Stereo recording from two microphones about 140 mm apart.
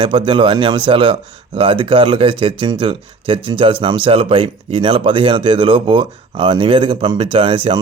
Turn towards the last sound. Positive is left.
turn(degrees=-40)  # may be behind; listen again after turning